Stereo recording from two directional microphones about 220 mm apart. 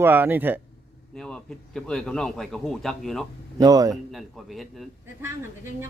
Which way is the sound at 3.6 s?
15° right (ahead or behind).